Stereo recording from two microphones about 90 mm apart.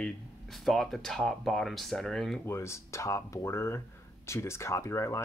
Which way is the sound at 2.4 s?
30° left (ahead or behind).